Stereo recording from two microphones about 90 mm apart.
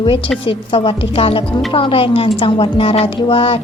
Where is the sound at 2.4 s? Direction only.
75° left (ahead or behind).